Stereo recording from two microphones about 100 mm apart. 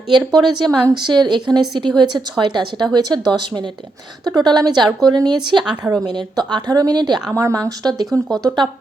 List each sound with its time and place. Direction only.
0.3 s speech: 45° right (ahead or behind)
7.3 s speech: 35° right (ahead or behind)
8.1 s speech: 10° left (ahead or behind)